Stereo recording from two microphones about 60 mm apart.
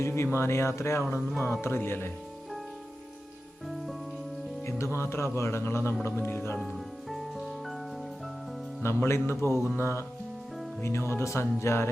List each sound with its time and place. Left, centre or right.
0.0 s speech: left
4.6 s speech: left
6.6 s music: centre
8.8 s speech: left